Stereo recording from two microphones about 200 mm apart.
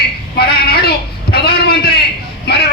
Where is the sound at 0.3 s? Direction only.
50° left (ahead or behind).